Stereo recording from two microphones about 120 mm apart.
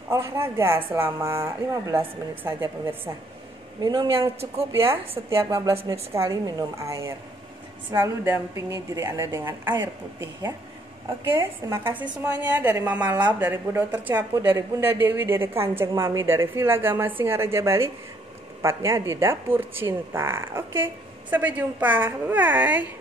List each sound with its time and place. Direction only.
0.1 s a woman's voice: 20° right (ahead or behind)
3.8 s a woman's voice: 35° right (ahead or behind)
11.2 s a woman's voice: 25° right (ahead or behind)
11.9 s a woman's voice: 10° right (ahead or behind)